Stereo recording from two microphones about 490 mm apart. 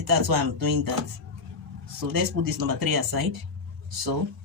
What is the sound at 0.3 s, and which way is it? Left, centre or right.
Speech, right.